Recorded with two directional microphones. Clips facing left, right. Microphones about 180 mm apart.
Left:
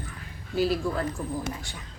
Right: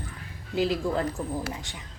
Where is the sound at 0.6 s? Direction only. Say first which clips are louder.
Even; 20° right (ahead or behind).